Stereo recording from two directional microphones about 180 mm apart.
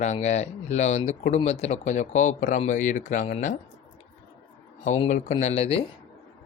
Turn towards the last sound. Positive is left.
turn(degrees=35)  # may be behind; listen again after turning